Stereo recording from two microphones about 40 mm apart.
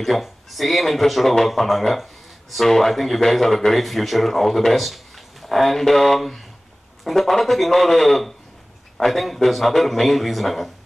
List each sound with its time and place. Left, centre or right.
0.0 s speech: centre